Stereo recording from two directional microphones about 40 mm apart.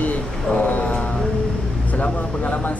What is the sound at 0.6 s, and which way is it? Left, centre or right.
Mantra, left.